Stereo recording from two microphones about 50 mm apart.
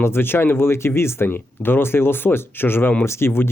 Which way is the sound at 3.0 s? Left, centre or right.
Left.